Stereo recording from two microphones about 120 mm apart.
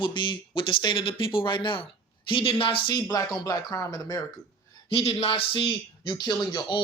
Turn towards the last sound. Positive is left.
turn(degrees=40)  # may be behind; listen again after turning